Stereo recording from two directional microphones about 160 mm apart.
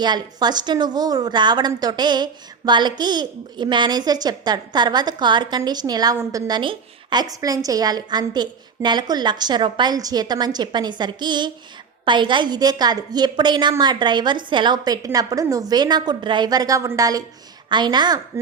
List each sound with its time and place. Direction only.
0.0 s a woman's voice: 25° right (ahead or behind)